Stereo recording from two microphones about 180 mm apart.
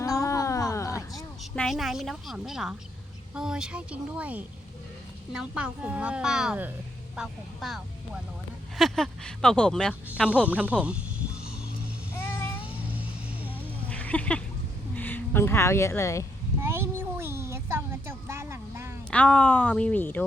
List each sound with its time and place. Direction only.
0.0 s a sound: 15° left (ahead or behind)
1.1 s a woman's voice: centre (ahead or behind)
10.4 s music: 10° right (ahead or behind)
12.1 s vehicle: 15° left (ahead or behind)
12.6 s vehicle: 10° right (ahead or behind)
13.8 s a sound: 10° left (ahead or behind)
14.9 s speech: 10° left (ahead or behind)
16.6 s a sound: 15° right (ahead or behind)
19.1 s speech: 5° left (ahead or behind)